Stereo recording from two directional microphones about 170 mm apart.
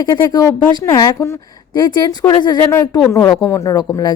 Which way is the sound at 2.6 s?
10° left (ahead or behind).